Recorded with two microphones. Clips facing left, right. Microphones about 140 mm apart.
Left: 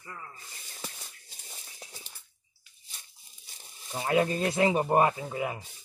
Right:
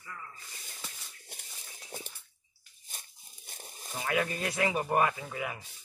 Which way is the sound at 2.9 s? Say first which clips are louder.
Right 3 dB; 50° right (ahead or behind).